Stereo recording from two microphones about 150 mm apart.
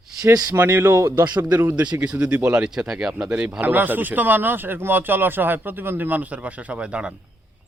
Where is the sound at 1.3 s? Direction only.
25° right (ahead or behind).